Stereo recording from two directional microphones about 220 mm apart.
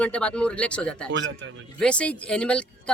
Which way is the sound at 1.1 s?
55° right (ahead or behind).